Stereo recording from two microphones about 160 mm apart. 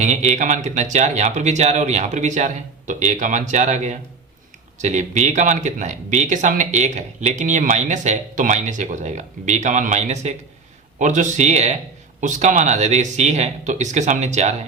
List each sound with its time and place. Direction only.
0.0 s speech: 50° right (ahead or behind)